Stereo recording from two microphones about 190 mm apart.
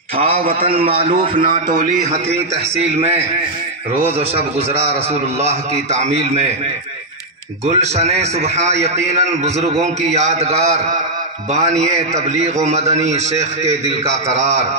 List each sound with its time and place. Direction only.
0.2 s a man's voice: 40° right (ahead or behind)
4.0 s a man's voice: 35° right (ahead or behind)
7.6 s a man's voice: 35° right (ahead or behind)